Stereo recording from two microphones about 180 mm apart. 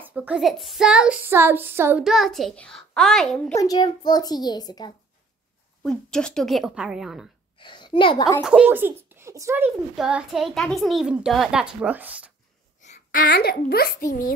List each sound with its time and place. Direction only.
0.0 s speech: 10° right (ahead or behind)
2.0 s a child's voice: centre (ahead or behind)
3.5 s a child's voice: 20° left (ahead or behind)
5.8 s a child's voice: 5° left (ahead or behind)
7.5 s a child's voice: 25° left (ahead or behind)
8.5 s speech: 10° right (ahead or behind)
9.9 s a child's voice: 5° right (ahead or behind)
12.8 s a sound: 45° left (ahead or behind)
13.3 s a child's voice: 60° left (ahead or behind)